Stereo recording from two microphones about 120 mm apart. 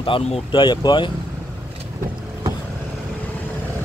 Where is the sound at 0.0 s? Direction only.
45° left (ahead or behind).